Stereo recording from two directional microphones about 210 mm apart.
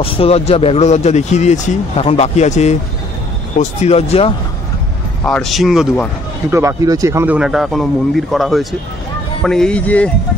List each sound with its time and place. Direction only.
0.0 s speech: 30° left (ahead or behind)
5.2 s speech: centre (ahead or behind)
6.5 s speech: 15° right (ahead or behind); by 10.1 s 5° left (ahead or behind)